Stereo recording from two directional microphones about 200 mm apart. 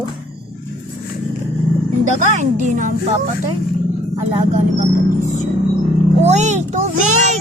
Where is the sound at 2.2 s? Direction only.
40° right (ahead or behind).